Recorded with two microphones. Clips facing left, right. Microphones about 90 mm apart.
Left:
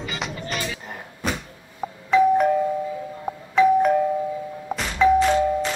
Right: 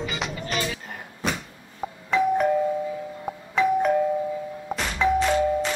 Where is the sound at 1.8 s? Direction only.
Centre (ahead or behind).